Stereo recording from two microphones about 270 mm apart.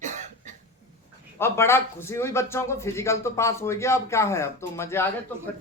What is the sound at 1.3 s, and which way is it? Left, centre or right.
A man's voice, centre.